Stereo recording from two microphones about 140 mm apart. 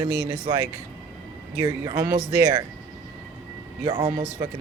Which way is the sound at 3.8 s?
35° right (ahead or behind).